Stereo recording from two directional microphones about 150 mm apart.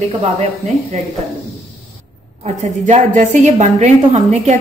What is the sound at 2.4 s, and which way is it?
A woman's voice, 50° right (ahead or behind).